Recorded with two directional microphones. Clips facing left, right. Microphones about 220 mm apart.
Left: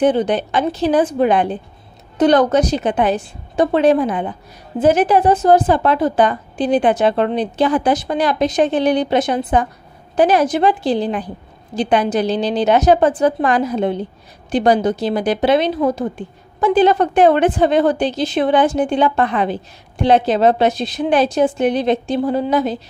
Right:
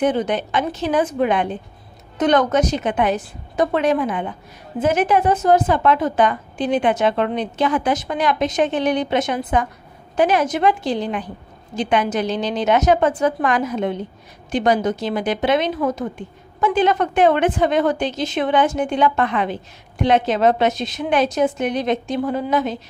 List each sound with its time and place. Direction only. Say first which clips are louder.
0.0 s a woman's voice: left 4 dB; 30° left (ahead or behind)